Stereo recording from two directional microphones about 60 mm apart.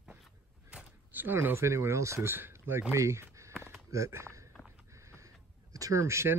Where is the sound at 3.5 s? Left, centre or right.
Right.